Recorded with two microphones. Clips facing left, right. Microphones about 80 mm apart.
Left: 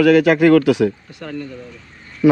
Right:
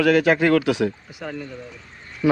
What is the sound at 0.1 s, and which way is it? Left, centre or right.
Speech, left.